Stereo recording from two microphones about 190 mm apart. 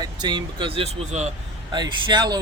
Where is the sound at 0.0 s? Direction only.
20° right (ahead or behind).